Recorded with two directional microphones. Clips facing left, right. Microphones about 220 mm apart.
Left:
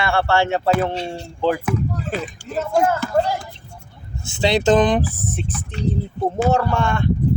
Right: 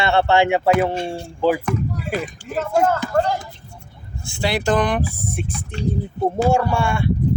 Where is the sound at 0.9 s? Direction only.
50° right (ahead or behind).